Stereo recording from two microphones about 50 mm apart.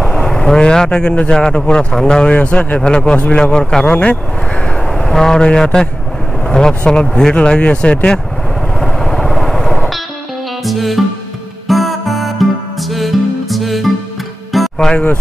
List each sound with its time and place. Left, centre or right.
0.0 s a man's voice: centre
4.8 s speech: centre; by 8.2 s left
8.7 s vehicle: centre
10.6 s music: centre